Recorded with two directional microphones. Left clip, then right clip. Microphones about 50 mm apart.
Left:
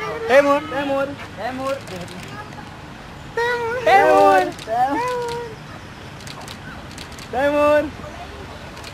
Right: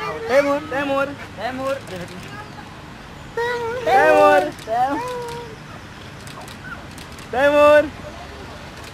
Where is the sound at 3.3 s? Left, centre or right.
Centre.